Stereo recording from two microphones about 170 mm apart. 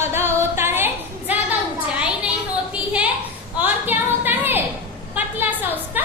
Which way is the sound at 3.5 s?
10° right (ahead or behind).